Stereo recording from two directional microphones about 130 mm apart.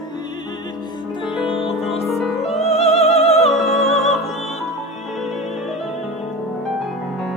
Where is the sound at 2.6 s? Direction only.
55° left (ahead or behind).